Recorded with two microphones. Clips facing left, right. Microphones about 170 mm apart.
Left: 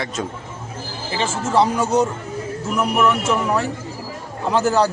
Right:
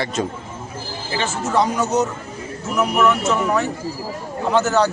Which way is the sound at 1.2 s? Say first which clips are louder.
Left 2 dB; 30° left (ahead or behind).